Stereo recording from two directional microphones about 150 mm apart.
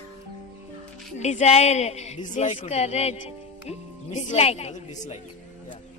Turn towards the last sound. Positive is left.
turn(degrees=45)  # may be behind; listen again after turning